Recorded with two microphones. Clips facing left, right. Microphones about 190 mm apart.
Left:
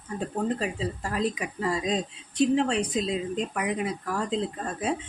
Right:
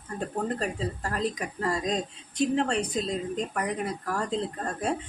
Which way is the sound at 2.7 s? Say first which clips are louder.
Left 2 dB; 40° right (ahead or behind).